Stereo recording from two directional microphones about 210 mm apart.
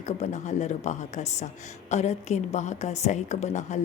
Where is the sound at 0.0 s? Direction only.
35° left (ahead or behind).